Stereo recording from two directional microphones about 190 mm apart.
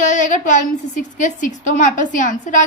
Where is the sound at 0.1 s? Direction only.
40° left (ahead or behind).